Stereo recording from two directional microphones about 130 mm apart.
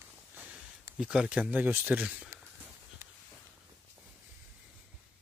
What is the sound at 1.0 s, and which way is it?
Speech, 5° right (ahead or behind).